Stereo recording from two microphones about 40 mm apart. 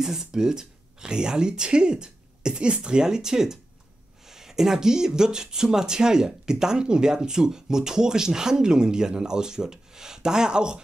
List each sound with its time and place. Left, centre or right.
0.0 s speech: centre